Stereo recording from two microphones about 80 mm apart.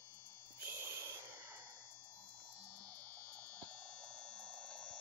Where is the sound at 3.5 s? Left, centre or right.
Centre.